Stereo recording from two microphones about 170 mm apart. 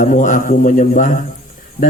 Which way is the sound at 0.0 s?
50° left (ahead or behind).